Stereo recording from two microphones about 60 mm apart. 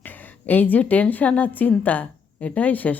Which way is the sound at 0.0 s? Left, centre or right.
Left.